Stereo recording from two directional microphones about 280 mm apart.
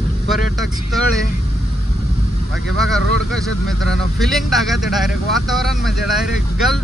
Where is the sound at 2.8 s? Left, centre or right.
Centre.